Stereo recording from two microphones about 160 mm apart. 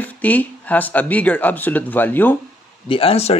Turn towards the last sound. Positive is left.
turn(degrees=40)  # may be behind; listen again after turning